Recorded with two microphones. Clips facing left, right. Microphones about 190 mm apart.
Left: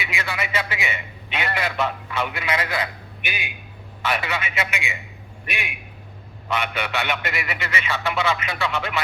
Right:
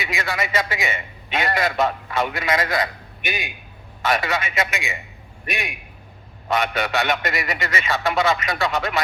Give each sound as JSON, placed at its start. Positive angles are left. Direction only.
{"t": 0.0, "sound": "a man's voice", "side_deg": -40}